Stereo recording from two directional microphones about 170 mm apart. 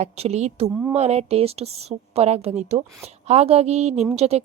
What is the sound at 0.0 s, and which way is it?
Speech, 40° right (ahead or behind).